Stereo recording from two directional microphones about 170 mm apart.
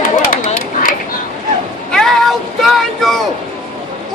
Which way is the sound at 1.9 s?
Centre (ahead or behind).